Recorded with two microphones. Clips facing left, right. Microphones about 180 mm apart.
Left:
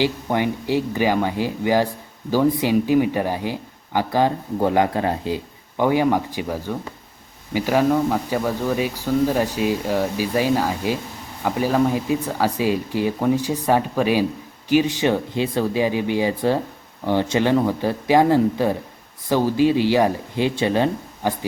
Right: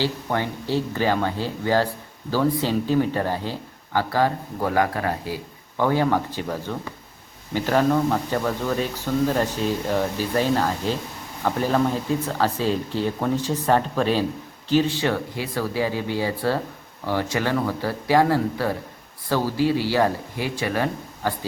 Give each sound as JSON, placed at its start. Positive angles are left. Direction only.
{"t": 0.0, "sound": "speech", "side_deg": 15}